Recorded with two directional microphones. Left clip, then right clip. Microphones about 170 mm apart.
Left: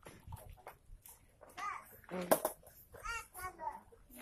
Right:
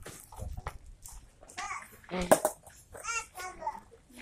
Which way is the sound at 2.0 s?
5° left (ahead or behind).